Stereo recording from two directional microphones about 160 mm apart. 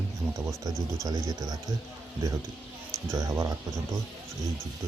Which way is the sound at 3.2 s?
20° right (ahead or behind).